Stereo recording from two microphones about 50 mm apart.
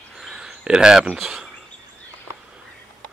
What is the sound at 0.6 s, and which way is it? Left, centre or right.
Speech, centre.